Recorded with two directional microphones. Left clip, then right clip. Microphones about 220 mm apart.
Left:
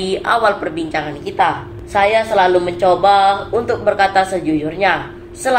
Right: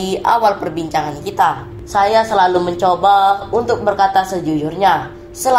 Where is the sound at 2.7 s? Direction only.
10° right (ahead or behind).